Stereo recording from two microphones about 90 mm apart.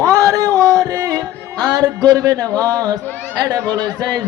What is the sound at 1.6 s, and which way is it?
Speech, 45° right (ahead or behind).